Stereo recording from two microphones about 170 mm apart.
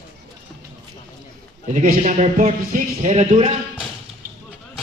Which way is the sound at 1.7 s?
50° right (ahead or behind).